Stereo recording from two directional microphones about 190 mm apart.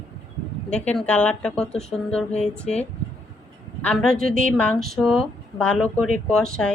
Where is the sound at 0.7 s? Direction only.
5° left (ahead or behind).